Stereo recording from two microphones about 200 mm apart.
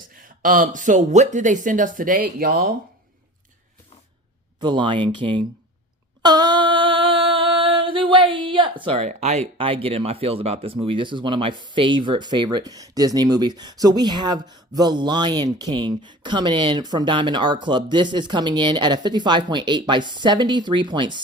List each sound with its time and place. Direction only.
0.1 s speech: 45° right (ahead or behind)
4.6 s speech: 25° right (ahead or behind)
6.2 s a sound: 20° right (ahead or behind)
14.8 s speech: 20° right (ahead or behind)